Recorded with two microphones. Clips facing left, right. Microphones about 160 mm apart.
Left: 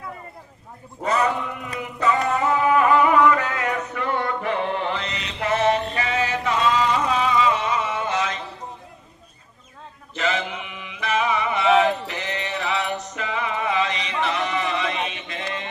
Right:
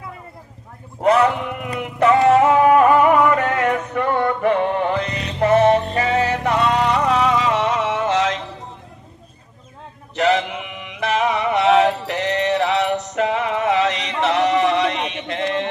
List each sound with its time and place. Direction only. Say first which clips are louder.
1.0 s male singing: right 6 dB; 65° right (ahead or behind); by 6.2 s 40° right (ahead or behind)
6.2 s music: right 3 dB; 60° right (ahead or behind); by 8.4 s 85° right
10.2 s music: right 7 dB; 70° right (ahead or behind)